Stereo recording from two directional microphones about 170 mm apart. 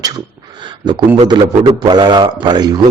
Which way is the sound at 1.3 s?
25° right (ahead or behind).